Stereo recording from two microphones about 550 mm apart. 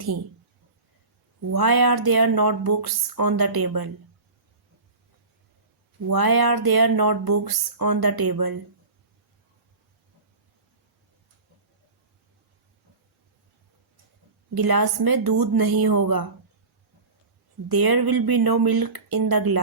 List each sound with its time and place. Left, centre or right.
1.5 s speech: right
6.1 s speech: right
14.5 s speech: right
17.7 s speech: right